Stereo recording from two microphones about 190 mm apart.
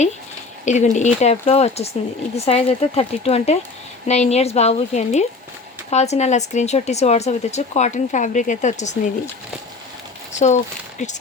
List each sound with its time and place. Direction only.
0.6 s speech: 40° left (ahead or behind)
10.3 s speech: 40° left (ahead or behind)